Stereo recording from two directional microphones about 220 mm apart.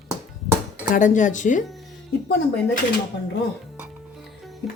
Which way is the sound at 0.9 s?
35° left (ahead or behind).